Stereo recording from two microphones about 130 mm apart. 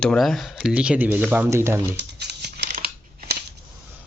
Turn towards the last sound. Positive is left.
turn(degrees=-85)